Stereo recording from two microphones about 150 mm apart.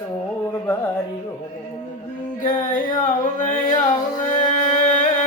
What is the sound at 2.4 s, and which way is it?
Singing, 60° left (ahead or behind).